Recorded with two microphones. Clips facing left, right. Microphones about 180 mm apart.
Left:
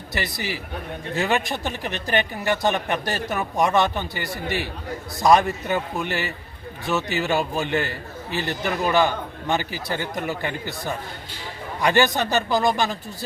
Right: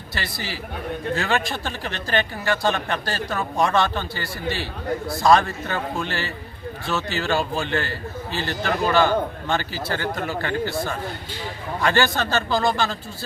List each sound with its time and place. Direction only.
0.1 s a man's voice: 20° left (ahead or behind)